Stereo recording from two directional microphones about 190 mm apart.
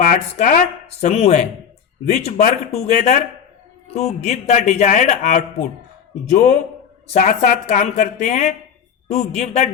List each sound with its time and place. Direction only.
0.0 s speech: 45° left (ahead or behind)
1.0 s a man's voice: 35° left (ahead or behind)